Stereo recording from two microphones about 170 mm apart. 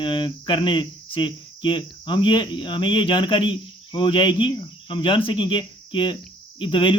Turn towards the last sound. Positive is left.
turn(degrees=30)  # may be behind; listen again after turning